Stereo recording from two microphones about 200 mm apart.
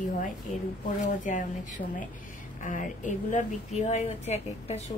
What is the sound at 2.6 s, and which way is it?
Speech, 40° left (ahead or behind).